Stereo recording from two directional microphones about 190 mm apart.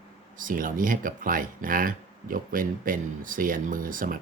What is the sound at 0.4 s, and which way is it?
Speech, 45° right (ahead or behind).